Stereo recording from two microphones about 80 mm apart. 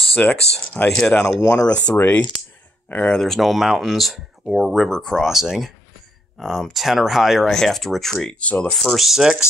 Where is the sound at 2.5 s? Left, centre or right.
Centre.